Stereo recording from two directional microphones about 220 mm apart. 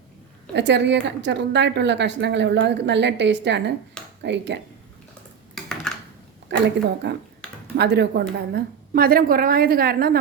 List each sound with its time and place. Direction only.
0.5 s a woman's voice: 50° right (ahead or behind)
5.5 s computer keyboard: 5° left (ahead or behind)
6.5 s a woman's voice: 50° right (ahead or behind)
7.4 s a sound: 5° left (ahead or behind)
7.8 s a woman's voice: 50° right (ahead or behind)